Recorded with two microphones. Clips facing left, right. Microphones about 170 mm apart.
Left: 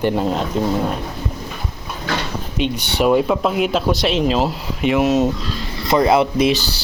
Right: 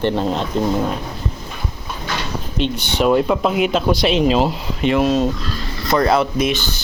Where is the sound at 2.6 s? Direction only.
10° left (ahead or behind).